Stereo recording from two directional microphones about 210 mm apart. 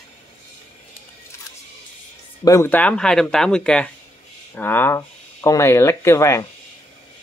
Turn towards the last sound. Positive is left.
turn(degrees=15)  # may be behind; listen again after turning